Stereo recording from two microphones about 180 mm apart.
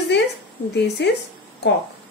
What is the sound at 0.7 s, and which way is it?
Speech, 70° left (ahead or behind).